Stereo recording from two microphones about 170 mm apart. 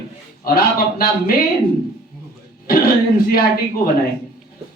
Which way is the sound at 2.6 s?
60° left (ahead or behind).